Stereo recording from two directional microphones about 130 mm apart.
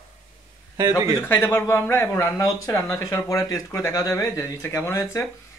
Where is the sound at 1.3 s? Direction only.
20° left (ahead or behind).